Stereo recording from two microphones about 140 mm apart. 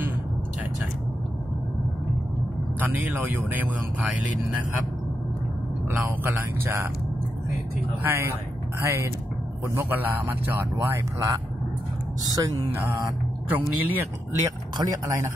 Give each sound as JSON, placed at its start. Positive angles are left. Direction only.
{"t": 2.8, "sound": "speech", "side_deg": -10}
{"t": 5.9, "sound": "speech", "side_deg": -15}
{"t": 8.0, "sound": "speech", "side_deg": -15}
{"t": 13.5, "sound": "speech", "side_deg": -15}
{"t": 14.4, "sound": "speech", "side_deg": -25}